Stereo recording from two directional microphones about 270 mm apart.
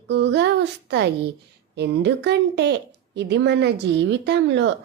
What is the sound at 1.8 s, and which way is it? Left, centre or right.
Speech, right.